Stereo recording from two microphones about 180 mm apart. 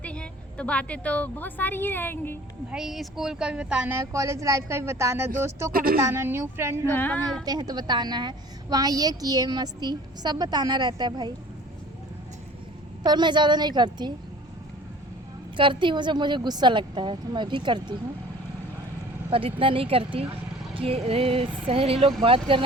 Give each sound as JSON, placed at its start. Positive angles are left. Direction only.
{"t": 0.0, "sound": "a woman's voice", "side_deg": 5}
{"t": 2.7, "sound": "speech", "side_deg": 0}
{"t": 5.7, "sound": "a woman's voice", "side_deg": -55}
{"t": 6.0, "sound": "speech", "side_deg": -15}
{"t": 6.9, "sound": "a woman's voice", "side_deg": 10}
{"t": 7.4, "sound": "a woman's voice", "side_deg": -20}
{"t": 13.0, "sound": "a woman's voice", "side_deg": -25}
{"t": 15.5, "sound": "a woman's voice", "side_deg": -25}
{"t": 19.3, "sound": "a woman's voice", "side_deg": -30}